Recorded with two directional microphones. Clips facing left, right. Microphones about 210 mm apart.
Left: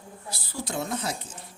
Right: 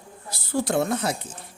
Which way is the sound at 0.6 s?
60° right (ahead or behind).